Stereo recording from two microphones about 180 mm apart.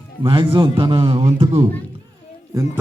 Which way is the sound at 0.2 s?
30° right (ahead or behind).